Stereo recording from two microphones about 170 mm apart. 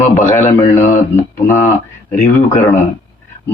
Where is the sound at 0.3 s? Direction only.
15° left (ahead or behind).